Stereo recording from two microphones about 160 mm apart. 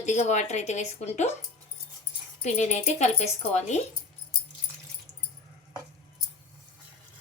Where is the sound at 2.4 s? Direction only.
45° left (ahead or behind).